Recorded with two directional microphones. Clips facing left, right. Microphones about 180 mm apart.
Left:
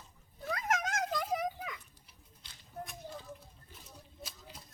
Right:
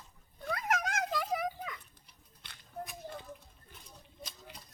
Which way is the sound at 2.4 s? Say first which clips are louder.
Right 5 dB; 60° right (ahead or behind).